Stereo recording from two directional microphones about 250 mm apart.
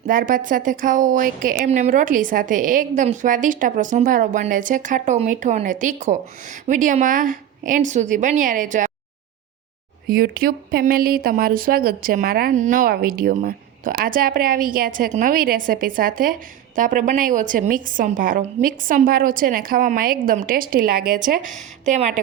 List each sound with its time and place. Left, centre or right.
0.1 s a woman's voice: right
10.1 s a woman's voice: right